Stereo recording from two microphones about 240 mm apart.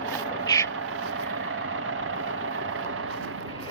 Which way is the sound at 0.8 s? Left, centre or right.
Right.